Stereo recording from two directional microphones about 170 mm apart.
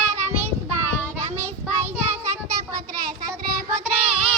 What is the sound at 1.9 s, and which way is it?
Child singing, 15° right (ahead or behind).